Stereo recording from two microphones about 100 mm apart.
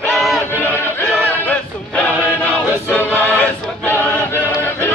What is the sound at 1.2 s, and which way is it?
Music, 15° left (ahead or behind).